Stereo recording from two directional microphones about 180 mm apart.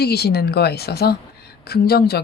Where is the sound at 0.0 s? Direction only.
60° left (ahead or behind).